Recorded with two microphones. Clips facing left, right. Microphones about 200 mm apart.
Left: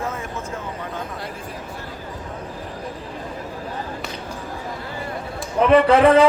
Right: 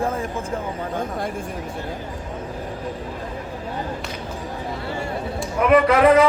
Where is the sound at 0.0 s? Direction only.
30° right (ahead or behind).